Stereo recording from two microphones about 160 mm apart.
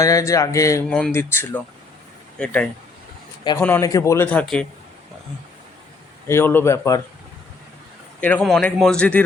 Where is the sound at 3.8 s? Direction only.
20° left (ahead or behind).